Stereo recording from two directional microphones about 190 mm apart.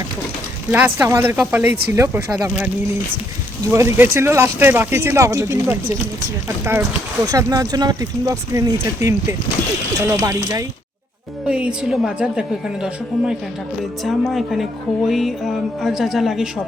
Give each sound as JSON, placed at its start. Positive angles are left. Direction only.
{"t": 0.7, "sound": "speech", "side_deg": -10}
{"t": 7.3, "sound": "speech", "side_deg": -20}